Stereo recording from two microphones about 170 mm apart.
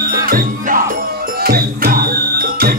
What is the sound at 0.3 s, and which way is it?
Music, 55° right (ahead or behind).